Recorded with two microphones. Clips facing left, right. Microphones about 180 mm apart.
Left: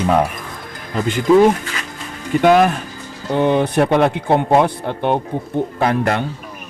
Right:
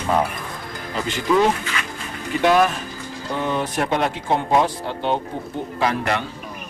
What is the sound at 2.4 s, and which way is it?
Speech, 55° left (ahead or behind).